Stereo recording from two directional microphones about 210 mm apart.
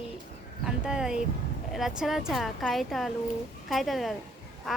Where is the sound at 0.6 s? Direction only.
5° right (ahead or behind).